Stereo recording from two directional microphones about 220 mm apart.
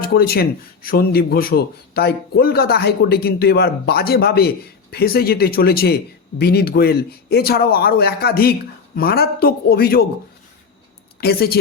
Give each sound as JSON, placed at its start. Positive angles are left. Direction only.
{"t": 0.0, "sound": "speech", "side_deg": 45}
{"t": 11.2, "sound": "speech", "side_deg": 45}